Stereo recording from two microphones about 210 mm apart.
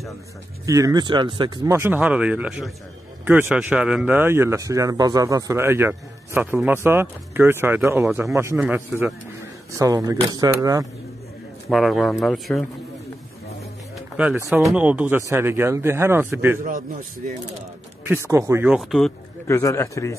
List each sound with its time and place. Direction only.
0.7 s speech: 15° right (ahead or behind)
11.7 s speech: centre (ahead or behind)
14.1 s speech: 10° right (ahead or behind)
17.2 s speech: 40° right (ahead or behind)
18.0 s speech: 10° right (ahead or behind)
19.4 s a man's voice: 15° left (ahead or behind)